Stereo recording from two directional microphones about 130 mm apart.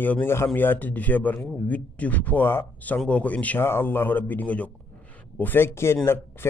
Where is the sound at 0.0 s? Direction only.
15° left (ahead or behind).